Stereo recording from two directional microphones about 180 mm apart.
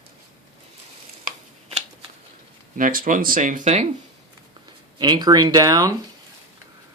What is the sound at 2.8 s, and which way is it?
Speech, 50° right (ahead or behind).